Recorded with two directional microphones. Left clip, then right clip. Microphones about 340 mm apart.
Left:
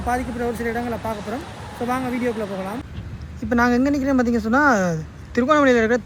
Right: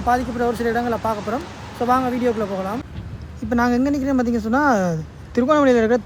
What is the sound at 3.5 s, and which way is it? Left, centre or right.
Speech, centre.